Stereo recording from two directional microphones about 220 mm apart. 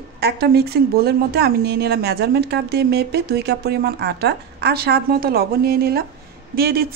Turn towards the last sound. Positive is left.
turn(degrees=-45)  # may be behind; listen again after turning